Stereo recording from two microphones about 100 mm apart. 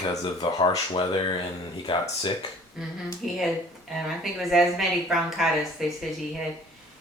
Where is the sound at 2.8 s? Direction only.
5° right (ahead or behind).